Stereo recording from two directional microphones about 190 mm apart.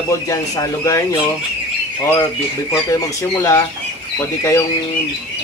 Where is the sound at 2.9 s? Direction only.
15° left (ahead or behind).